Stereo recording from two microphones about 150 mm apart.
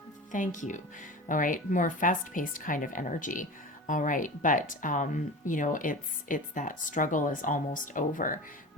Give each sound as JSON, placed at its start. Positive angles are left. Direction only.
{"t": 0.3, "sound": "speech", "side_deg": 55}